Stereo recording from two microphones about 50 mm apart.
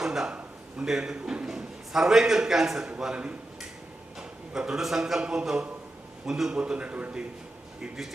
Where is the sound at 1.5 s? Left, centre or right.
Centre.